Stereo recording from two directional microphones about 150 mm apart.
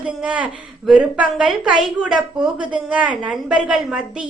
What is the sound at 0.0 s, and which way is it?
A woman's voice, 5° right (ahead or behind).